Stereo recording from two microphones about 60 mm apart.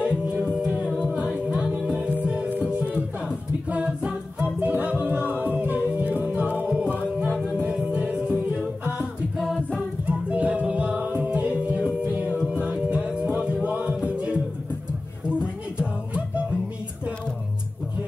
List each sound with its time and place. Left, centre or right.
0.0 s music: centre
2.0 s music: centre
7.3 s music: centre
7.6 s music: right
9.4 s a capella: centre
10.0 s music: right